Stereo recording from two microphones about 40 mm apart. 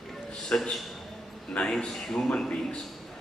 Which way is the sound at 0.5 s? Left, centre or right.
Left.